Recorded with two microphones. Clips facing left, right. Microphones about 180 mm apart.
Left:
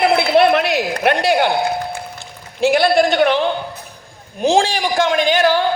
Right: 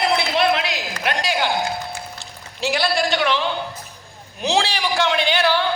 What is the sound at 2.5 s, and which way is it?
A man's voice, 55° left (ahead or behind).